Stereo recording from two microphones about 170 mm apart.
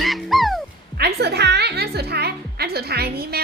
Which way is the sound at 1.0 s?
70° right (ahead or behind).